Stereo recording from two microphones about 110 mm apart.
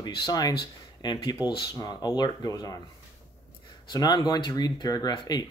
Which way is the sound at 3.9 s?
40° left (ahead or behind).